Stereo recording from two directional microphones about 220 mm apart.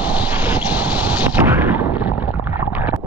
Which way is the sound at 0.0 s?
5° right (ahead or behind).